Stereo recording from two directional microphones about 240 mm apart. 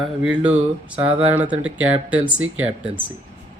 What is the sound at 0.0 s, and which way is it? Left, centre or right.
Speech, centre.